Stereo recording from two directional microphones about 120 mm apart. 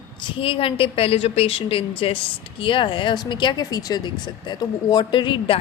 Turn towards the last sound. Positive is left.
turn(degrees=45)  # may be behind; listen again after turning